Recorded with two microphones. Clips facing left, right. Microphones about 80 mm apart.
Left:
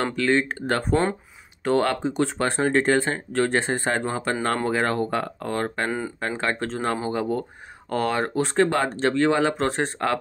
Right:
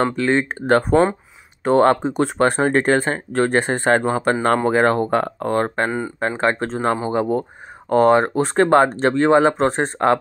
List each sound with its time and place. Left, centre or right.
0.0 s speech: right
5.9 s speech: centre
6.1 s speech: right